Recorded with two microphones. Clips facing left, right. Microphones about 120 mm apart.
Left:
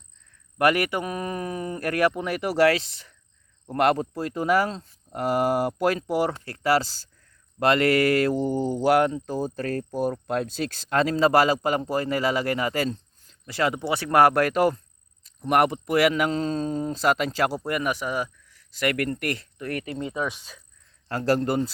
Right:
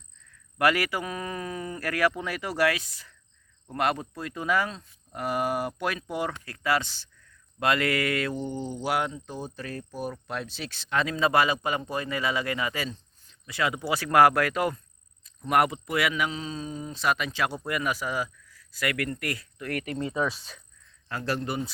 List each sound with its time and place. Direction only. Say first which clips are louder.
0.6 s speech: left 3 dB; 25° left (ahead or behind)
3.7 s speech: left 6 dB; 35° left (ahead or behind)
8.4 s speech: left 9 dB; 45° left (ahead or behind)
17.7 s speech: left 3 dB; 25° left (ahead or behind)
18.8 s speech: left 5 dB; 40° left (ahead or behind)
19.2 s speech: left 4 dB; 25° left (ahead or behind)
21.1 s speech: left 7 dB; 40° left (ahead or behind)